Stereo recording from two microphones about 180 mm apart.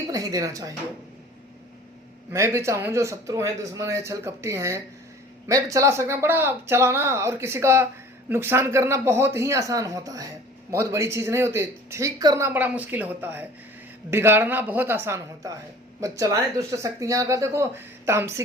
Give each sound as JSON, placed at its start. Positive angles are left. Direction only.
{"t": 0.1, "sound": "speech", "side_deg": -20}
{"t": 2.3, "sound": "speech", "side_deg": -15}